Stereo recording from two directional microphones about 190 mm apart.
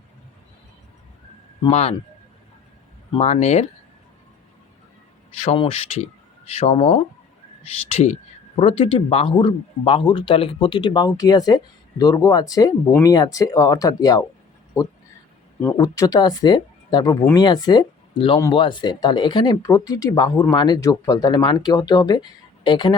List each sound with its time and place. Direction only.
1.6 s speech: 35° left (ahead or behind)
3.1 s speech: 30° left (ahead or behind)
5.4 s speech: 30° left (ahead or behind)
15.6 s speech: 15° left (ahead or behind)